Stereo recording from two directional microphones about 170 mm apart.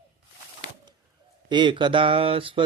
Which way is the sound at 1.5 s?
25° right (ahead or behind).